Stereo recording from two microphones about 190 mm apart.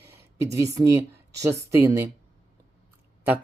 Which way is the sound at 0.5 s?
15° right (ahead or behind).